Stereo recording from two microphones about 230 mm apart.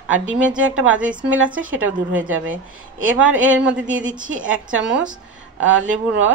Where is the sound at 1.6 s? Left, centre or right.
Right.